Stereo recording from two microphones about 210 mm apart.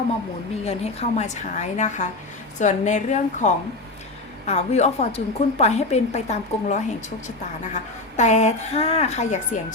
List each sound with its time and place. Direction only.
0.6 s a woman's voice: 30° left (ahead or behind)